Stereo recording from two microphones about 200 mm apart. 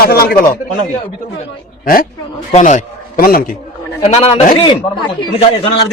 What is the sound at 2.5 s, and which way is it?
Speech, 40° left (ahead or behind).